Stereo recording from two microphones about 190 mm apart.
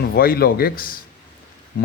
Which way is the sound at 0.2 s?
50° left (ahead or behind).